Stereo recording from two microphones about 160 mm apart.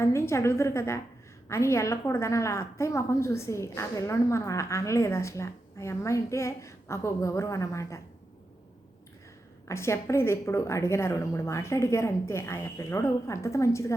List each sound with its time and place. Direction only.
0.0 s a woman's voice: 15° left (ahead or behind)
9.6 s a woman's voice: 15° left (ahead or behind)